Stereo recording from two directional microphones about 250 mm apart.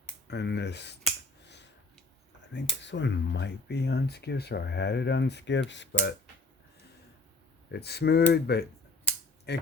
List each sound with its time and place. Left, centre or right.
0.3 s speech: left
2.5 s speech: left
7.7 s speech: left